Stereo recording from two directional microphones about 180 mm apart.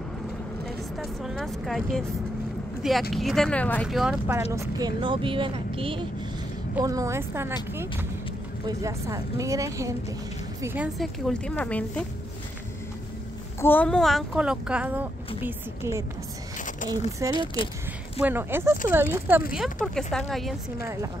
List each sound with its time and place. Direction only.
0.7 s speech: centre (ahead or behind)
3.8 s speech: centre (ahead or behind)
4.5 s speech: 20° right (ahead or behind)
6.8 s speech: 20° right (ahead or behind)
11.0 s speech: 5° left (ahead or behind)
13.6 s speech: 10° left (ahead or behind); by 16.1 s 15° right (ahead or behind)
16.5 s a sound: 45° left (ahead or behind)
17.2 s speech: 20° right (ahead or behind)
19.5 s speech: centre (ahead or behind)
20.8 s speech: 15° right (ahead or behind)